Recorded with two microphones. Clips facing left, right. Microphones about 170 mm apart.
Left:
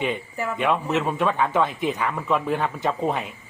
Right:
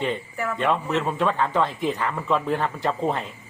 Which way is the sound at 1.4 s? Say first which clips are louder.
Left 1 dB; centre (ahead or behind).